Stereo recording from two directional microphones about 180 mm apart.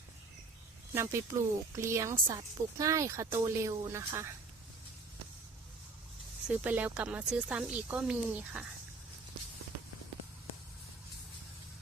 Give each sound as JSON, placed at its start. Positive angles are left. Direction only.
{"t": 0.9, "sound": "speech", "side_deg": -15}
{"t": 6.5, "sound": "speech", "side_deg": -10}